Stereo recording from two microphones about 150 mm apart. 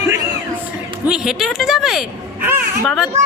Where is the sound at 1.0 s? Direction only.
5° right (ahead or behind).